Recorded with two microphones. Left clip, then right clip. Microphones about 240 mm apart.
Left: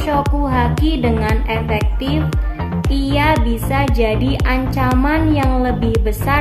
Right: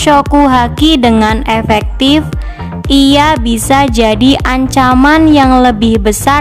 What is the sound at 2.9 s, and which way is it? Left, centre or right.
A woman's voice, right.